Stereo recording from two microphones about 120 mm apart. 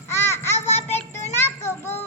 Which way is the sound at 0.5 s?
65° left (ahead or behind).